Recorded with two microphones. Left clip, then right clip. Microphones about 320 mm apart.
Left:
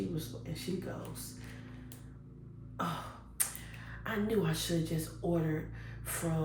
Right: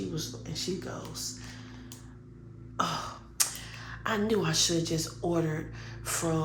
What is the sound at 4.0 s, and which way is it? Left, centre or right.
A woman's voice, centre.